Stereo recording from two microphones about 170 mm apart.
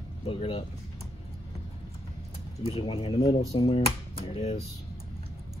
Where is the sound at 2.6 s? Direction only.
30° left (ahead or behind).